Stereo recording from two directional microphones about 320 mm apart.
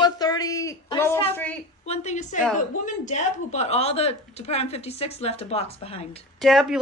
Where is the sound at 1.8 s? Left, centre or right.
Left.